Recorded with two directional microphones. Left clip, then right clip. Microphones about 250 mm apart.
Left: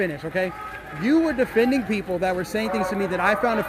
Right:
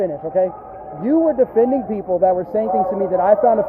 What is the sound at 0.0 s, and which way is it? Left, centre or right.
A man's voice, centre.